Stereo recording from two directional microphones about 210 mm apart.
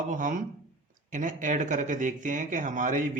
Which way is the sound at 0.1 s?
40° right (ahead or behind).